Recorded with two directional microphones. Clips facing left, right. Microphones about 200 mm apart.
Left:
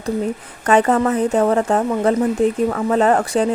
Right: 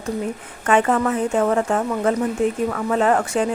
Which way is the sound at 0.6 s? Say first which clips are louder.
Left 3 dB; 40° left (ahead or behind).